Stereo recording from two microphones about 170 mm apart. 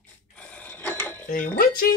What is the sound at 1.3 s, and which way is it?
Speech, 55° left (ahead or behind).